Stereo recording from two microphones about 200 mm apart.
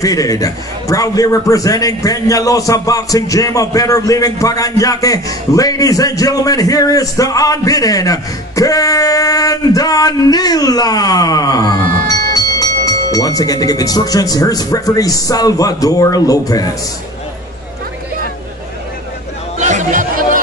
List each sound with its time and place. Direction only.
0.0 s a man's voice: 15° left (ahead or behind)
19.6 s chatter: 35° right (ahead or behind)